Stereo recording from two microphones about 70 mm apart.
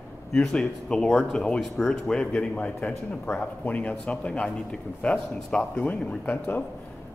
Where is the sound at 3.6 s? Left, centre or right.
Left.